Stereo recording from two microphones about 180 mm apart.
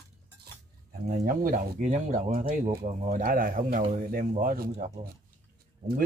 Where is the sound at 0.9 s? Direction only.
50° right (ahead or behind).